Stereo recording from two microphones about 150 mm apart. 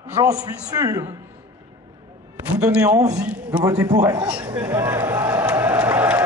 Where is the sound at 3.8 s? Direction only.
25° right (ahead or behind).